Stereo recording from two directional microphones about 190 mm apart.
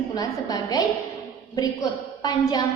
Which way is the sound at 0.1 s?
20° left (ahead or behind).